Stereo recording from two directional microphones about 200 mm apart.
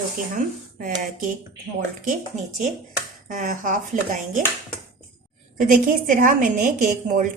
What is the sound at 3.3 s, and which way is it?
A woman's voice, 40° right (ahead or behind).